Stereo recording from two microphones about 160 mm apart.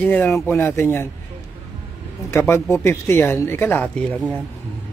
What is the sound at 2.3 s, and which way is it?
Speech, 15° left (ahead or behind).